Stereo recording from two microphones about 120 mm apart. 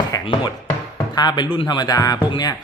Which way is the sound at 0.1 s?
30° left (ahead or behind).